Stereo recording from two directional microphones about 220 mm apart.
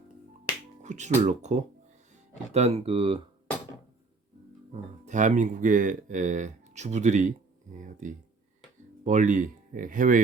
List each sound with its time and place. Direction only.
0.8 s speech: 30° right (ahead or behind)
4.7 s speech: 35° right (ahead or behind)